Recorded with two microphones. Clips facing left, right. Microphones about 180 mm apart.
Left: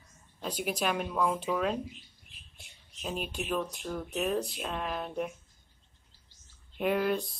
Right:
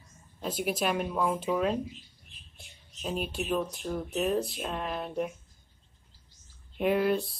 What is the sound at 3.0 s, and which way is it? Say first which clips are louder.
Speech: right 3 dB; 5° right (ahead or behind).